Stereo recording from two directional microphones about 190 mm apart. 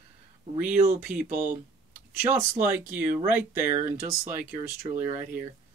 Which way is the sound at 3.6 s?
40° right (ahead or behind).